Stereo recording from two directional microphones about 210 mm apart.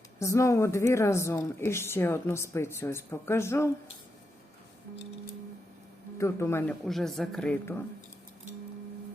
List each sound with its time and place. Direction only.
0.2 s speech: 15° left (ahead or behind)
6.1 s speech: 10° left (ahead or behind)